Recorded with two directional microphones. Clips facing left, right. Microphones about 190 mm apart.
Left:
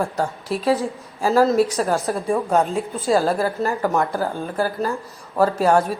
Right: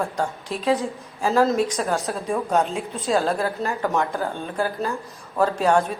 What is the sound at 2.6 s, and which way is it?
Speech, centre (ahead or behind).